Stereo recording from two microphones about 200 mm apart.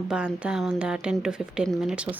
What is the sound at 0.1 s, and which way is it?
A woman's voice, 5° right (ahead or behind).